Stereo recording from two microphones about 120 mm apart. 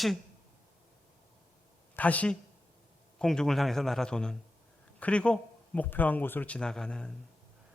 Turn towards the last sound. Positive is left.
turn(degrees=5)  # may be behind; listen again after turning